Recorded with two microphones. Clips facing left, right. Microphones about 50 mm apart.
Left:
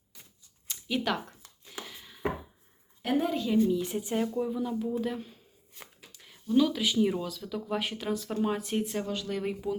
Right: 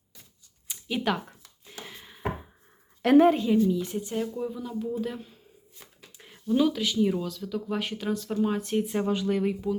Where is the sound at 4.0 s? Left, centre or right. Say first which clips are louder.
Even; centre.